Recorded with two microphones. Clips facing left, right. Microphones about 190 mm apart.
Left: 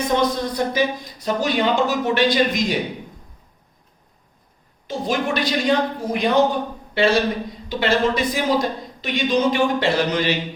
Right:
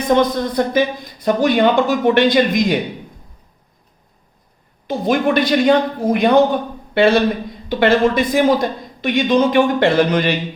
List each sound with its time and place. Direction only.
0.2 s a woman's voice: 55° right (ahead or behind)
4.9 s a woman's voice: 55° right (ahead or behind)